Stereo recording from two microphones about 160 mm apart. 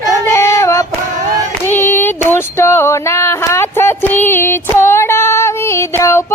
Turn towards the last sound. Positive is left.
turn(degrees=15)  # may be behind; listen again after turning